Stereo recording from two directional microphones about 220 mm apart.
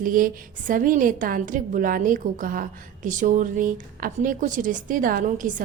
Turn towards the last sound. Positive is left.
turn(degrees=-35)  # may be behind; listen again after turning